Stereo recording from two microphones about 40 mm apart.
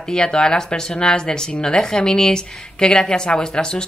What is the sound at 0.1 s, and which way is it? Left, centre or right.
Speech, left.